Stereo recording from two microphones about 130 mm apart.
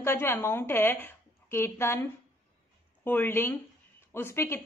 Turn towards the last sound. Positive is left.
turn(degrees=20)  # may be behind; listen again after turning